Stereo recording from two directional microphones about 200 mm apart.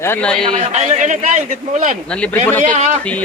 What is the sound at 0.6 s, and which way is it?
A man's voice, 35° right (ahead or behind).